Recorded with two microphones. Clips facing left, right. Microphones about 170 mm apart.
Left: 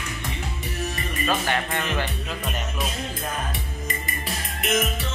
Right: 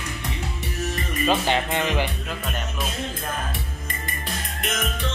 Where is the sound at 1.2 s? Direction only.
20° right (ahead or behind).